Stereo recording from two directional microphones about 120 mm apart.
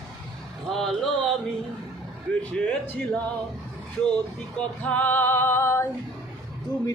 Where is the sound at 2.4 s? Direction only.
15° left (ahead or behind).